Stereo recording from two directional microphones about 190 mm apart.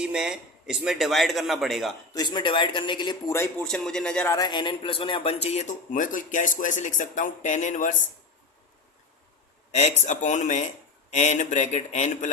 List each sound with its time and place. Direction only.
0.0 s speech: 5° right (ahead or behind)
2.1 s a man's voice: 25° left (ahead or behind)
3.6 s speech: 5° left (ahead or behind)
4.4 s speech: 20° left (ahead or behind); by 8.0 s 40° left (ahead or behind)
9.7 s speech: 35° left (ahead or behind)